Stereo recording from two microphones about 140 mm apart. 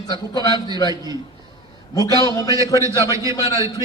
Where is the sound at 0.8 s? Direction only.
25° right (ahead or behind).